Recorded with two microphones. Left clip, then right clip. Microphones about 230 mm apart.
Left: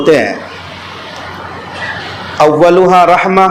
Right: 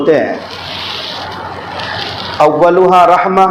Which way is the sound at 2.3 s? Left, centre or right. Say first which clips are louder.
Left 2 dB; left.